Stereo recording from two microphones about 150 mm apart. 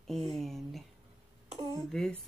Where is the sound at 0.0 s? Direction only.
Centre (ahead or behind).